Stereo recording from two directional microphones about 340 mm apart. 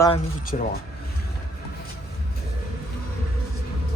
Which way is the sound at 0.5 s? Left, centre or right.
Left.